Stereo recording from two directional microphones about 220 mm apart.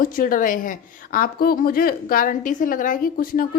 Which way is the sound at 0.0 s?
40° left (ahead or behind).